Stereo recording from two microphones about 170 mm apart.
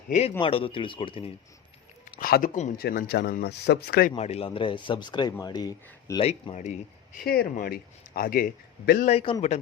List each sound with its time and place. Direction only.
0.1 s speech: 40° left (ahead or behind)
2.1 s speech: 55° left (ahead or behind)
2.7 s speech: 65° left (ahead or behind)
4.1 s a man's voice: 35° left (ahead or behind)
6.2 s speech: 40° left (ahead or behind)
7.5 s a man's voice: 60° left (ahead or behind)
9.0 s speech: 35° left (ahead or behind)